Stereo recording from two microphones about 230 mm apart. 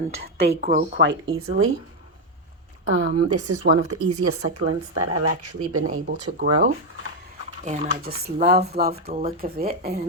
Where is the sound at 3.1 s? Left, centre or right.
Right.